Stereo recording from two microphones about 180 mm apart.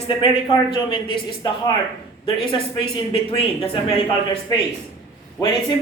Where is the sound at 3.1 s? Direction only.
30° left (ahead or behind).